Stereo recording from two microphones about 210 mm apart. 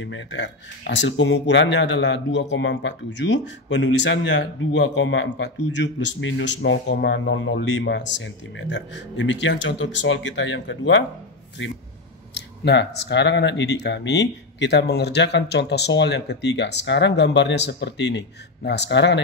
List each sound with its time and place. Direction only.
0.0 s speech: 60° left (ahead or behind)
12.4 s speech: 55° left (ahead or behind)